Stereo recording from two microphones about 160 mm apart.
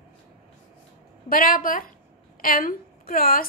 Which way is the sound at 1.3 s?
60° left (ahead or behind).